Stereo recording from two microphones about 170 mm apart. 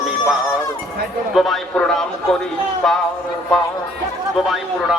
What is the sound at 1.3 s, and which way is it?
Speech, centre (ahead or behind).